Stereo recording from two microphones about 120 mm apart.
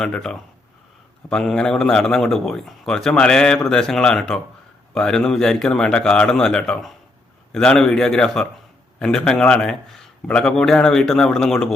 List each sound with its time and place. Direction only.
0.0 s a man's voice: 5° left (ahead or behind)